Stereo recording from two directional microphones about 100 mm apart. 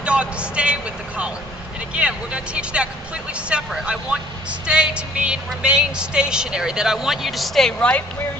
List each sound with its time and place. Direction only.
0.0 s a woman's voice: 10° right (ahead or behind); by 8.0 s 10° left (ahead or behind)